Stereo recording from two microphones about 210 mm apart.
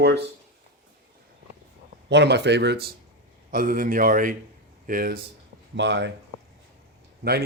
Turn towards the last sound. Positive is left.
turn(degrees=-50)  # may be behind; listen again after turning